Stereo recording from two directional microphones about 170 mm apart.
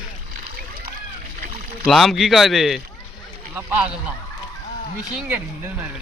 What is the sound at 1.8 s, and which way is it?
Speech, centre (ahead or behind).